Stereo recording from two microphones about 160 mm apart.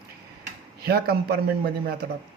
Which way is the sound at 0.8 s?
75° right (ahead or behind).